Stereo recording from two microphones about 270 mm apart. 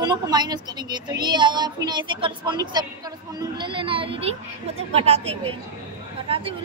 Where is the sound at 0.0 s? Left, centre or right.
Centre.